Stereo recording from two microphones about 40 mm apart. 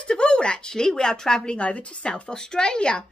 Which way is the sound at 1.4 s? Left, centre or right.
Left.